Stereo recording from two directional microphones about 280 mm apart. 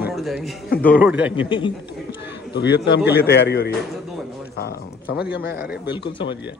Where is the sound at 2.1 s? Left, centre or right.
Left.